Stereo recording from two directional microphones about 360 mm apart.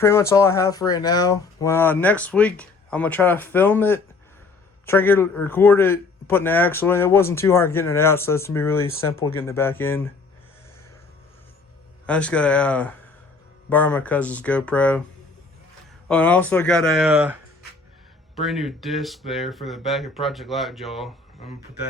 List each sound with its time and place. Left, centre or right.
0.0 s a man's voice: centre
9.0 s speech: left
9.3 s a man's voice: centre
12.0 s speech: centre
16.0 s speech: centre